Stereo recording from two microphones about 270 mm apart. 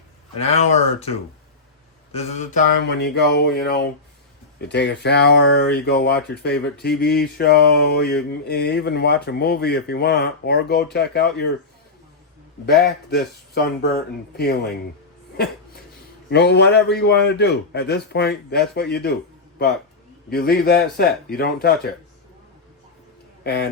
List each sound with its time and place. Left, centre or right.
0.3 s speech: left
2.1 s speech: left
12.8 s speech: left
16.3 s speech: left
20.3 s speech: left
23.4 s a man's voice: left